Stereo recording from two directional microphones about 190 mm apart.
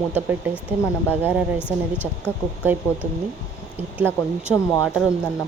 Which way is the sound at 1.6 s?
10° left (ahead or behind).